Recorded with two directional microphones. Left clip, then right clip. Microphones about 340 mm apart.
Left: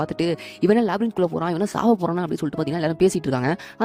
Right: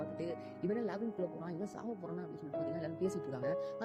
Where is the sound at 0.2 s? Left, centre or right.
Left.